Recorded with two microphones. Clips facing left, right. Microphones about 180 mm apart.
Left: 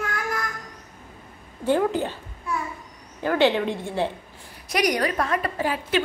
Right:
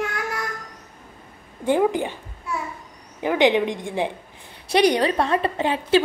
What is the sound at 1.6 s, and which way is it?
Speech, 15° right (ahead or behind).